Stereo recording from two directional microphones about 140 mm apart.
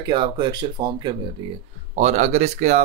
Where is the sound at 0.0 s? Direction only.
35° right (ahead or behind).